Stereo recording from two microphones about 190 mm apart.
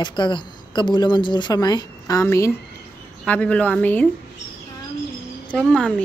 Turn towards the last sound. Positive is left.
turn(degrees=5)  # may be behind; listen again after turning